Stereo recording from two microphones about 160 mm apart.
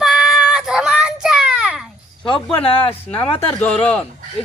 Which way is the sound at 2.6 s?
35° left (ahead or behind).